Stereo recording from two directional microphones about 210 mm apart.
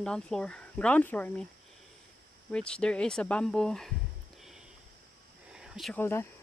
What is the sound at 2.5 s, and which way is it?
Speech, 5° left (ahead or behind).